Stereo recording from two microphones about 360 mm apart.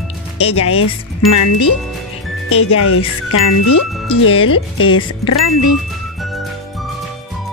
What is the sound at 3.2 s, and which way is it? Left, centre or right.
Speech, left.